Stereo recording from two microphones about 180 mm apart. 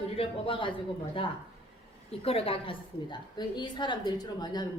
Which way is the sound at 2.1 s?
35° left (ahead or behind).